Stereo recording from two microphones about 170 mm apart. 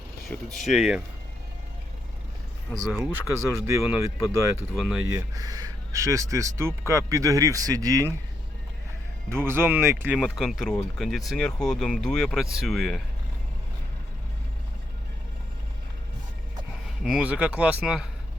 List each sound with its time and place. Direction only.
0.3 s speech: centre (ahead or behind)
2.6 s a man's voice: centre (ahead or behind)
4.7 s speech: centre (ahead or behind)
5.1 s speech: 20° right (ahead or behind)
9.3 s a man's voice: 15° right (ahead or behind)
10.2 s speech: centre (ahead or behind)
17.0 s a man's voice: 5° right (ahead or behind)